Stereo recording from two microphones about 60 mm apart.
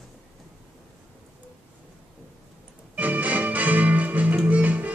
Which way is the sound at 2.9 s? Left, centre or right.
Right.